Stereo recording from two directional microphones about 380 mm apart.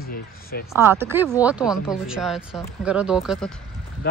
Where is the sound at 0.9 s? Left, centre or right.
Centre.